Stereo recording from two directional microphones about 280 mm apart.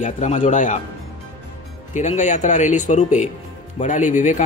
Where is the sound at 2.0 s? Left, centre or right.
Left.